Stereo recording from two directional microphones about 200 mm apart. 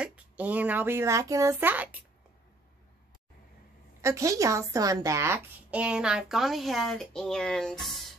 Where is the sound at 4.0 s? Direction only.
15° right (ahead or behind); by 8.1 s centre (ahead or behind).